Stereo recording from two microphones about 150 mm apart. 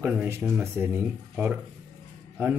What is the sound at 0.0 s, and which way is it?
Speech, 10° right (ahead or behind).